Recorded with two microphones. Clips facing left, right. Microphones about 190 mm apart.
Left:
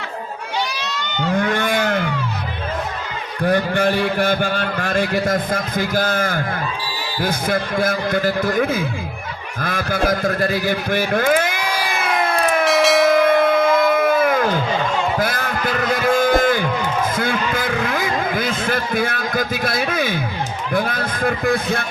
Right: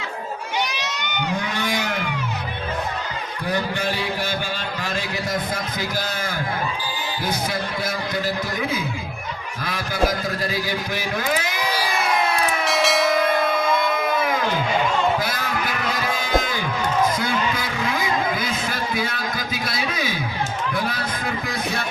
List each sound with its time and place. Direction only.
0.7 s crowd: 20° right (ahead or behind)
1.4 s cattle: 55° left (ahead or behind)
3.4 s a man's voice: 55° left (ahead or behind)
12.6 s bell: centre (ahead or behind)
13.2 s music: 55° left (ahead or behind)
15.2 s a sound: 55° left (ahead or behind)